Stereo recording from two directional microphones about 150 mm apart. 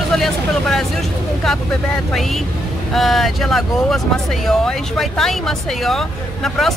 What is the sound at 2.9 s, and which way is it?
Speech, centre (ahead or behind).